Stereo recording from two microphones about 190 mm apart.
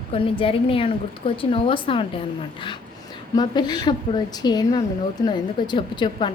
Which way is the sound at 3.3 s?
20° left (ahead or behind).